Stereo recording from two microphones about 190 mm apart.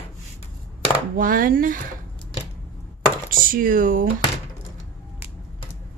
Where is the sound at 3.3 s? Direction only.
50° right (ahead or behind).